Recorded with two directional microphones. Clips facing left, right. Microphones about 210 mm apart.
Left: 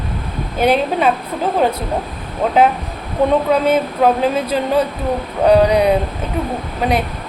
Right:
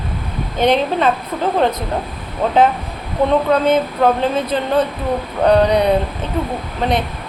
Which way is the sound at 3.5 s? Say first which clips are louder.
Even; 10° left (ahead or behind).